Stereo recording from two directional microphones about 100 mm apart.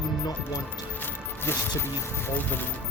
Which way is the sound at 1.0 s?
25° left (ahead or behind).